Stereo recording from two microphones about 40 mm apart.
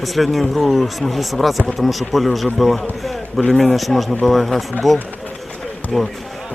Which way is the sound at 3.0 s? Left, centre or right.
Centre.